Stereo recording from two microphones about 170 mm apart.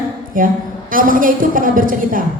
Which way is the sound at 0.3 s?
55° right (ahead or behind).